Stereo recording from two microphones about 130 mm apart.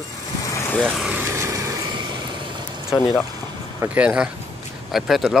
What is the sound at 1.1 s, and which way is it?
Vehicle, 15° right (ahead or behind).